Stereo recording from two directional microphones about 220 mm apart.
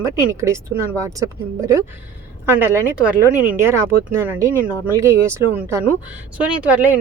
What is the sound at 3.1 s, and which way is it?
Speech, 5° right (ahead or behind).